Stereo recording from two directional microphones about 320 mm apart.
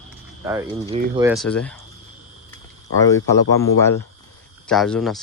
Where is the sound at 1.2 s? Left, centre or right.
Centre.